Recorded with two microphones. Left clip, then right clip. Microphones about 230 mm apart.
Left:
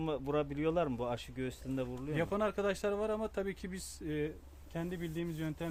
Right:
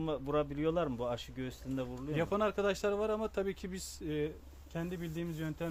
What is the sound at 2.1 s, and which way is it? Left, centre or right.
Speech, centre.